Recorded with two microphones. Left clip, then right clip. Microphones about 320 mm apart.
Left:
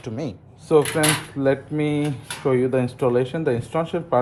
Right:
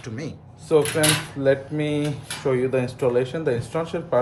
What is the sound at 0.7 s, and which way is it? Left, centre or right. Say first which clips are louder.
Speech: left 1 dB; centre.